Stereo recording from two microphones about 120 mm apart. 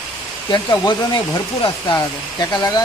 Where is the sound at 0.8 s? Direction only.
40° left (ahead or behind).